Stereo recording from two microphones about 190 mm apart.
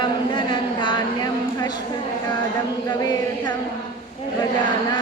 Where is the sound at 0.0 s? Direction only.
25° left (ahead or behind).